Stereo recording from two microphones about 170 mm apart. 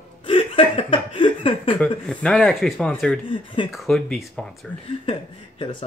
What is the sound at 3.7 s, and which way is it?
Speech, centre (ahead or behind).